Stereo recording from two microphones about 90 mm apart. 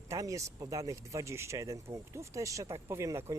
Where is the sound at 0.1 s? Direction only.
35° right (ahead or behind).